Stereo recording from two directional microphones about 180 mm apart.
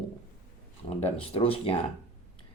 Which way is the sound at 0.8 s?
30° left (ahead or behind).